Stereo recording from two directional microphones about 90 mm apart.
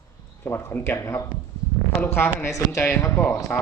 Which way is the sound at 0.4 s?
25° left (ahead or behind).